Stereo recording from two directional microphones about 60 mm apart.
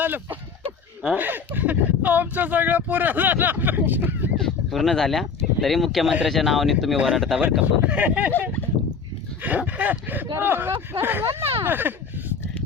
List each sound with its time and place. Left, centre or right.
0.0 s speech: right
4.4 s speech: centre
6.9 s speech: centre
7.2 s speech: centre
7.6 s speech: right
9.4 s speech: right